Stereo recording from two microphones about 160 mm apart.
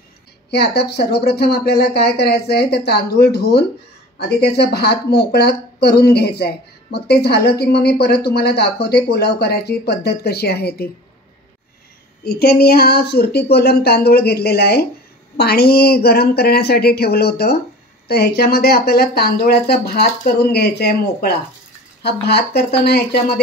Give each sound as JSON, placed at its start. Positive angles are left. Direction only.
{"t": 0.5, "sound": "speech", "side_deg": 90}
{"t": 12.3, "sound": "speech", "side_deg": 75}